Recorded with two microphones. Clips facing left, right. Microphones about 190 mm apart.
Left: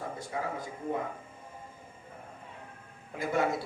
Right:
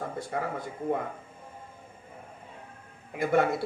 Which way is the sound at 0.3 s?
60° right (ahead or behind).